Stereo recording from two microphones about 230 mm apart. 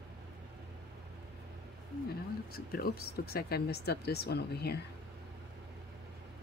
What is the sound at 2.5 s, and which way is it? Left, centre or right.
Speech, left.